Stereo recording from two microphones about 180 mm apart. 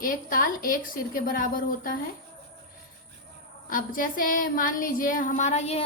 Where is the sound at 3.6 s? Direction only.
50° left (ahead or behind).